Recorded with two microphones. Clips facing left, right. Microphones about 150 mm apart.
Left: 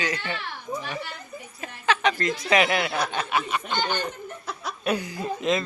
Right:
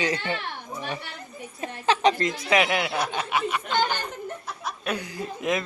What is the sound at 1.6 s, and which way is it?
Speech, 30° right (ahead or behind).